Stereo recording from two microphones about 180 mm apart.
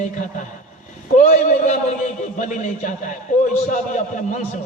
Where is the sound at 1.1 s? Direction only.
45° left (ahead or behind).